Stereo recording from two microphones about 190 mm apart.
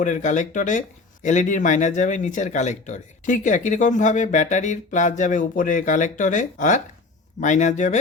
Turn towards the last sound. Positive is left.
turn(degrees=40)  # may be behind; listen again after turning